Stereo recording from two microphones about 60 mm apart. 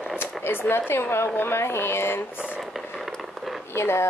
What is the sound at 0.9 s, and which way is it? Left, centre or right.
Speech, left.